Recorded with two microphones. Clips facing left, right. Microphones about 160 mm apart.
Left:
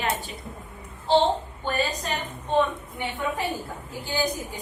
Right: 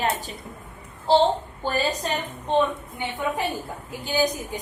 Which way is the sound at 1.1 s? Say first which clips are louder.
Right 2 dB; 40° right (ahead or behind).